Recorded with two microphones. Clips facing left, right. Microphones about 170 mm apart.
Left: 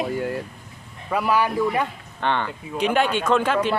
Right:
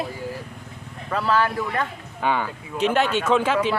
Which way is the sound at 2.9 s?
10° left (ahead or behind).